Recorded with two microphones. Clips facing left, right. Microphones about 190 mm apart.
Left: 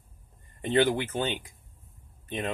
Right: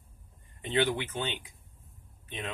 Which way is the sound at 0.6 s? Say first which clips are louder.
Left 5 dB; 45° left (ahead or behind).